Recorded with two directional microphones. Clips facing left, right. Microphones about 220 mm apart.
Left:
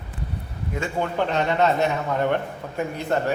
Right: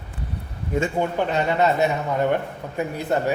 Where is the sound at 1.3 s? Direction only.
5° right (ahead or behind).